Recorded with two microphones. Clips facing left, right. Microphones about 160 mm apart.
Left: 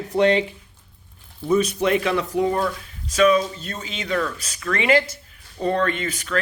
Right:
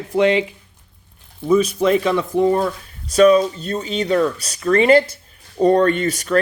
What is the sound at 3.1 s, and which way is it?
Speech, 35° right (ahead or behind).